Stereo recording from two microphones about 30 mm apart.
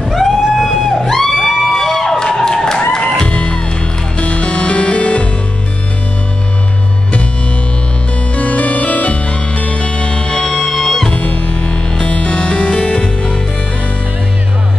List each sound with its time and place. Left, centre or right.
0.0 s music: centre
2.3 s a sound: centre
3.3 s music: left
8.4 s music: left
11.1 s music: left
11.7 s music: left
12.1 s music: left